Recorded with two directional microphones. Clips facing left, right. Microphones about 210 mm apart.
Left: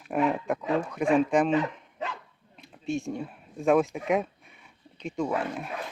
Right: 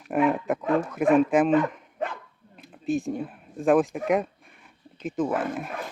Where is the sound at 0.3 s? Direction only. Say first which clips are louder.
Right 2 dB; 5° right (ahead or behind).